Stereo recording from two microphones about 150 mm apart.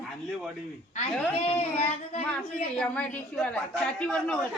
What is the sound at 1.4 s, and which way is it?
Child singing, 45° left (ahead or behind).